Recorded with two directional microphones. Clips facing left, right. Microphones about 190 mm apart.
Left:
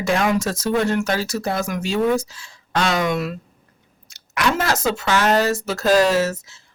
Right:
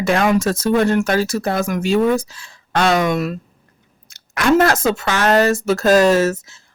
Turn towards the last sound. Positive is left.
turn(degrees=-50)  # may be behind; listen again after turning